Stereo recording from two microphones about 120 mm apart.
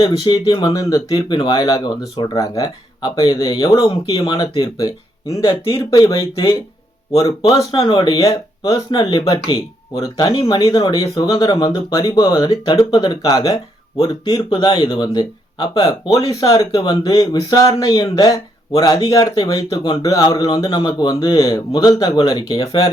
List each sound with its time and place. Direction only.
0.0 s speech: 30° left (ahead or behind)